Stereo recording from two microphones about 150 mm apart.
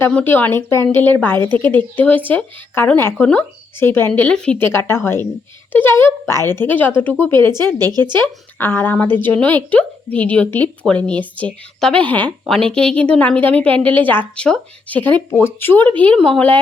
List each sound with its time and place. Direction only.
0.0 s a woman's voice: 10° left (ahead or behind)
1.5 s a woman's voice: 30° right (ahead or behind)
2.0 s a woman's voice: 10° left (ahead or behind)
7.8 s a woman's voice: 25° right (ahead or behind)
8.1 s a woman's voice: 15° left (ahead or behind)